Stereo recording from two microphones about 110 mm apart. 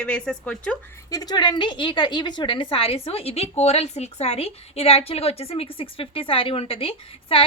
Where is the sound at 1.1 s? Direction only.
35° left (ahead or behind).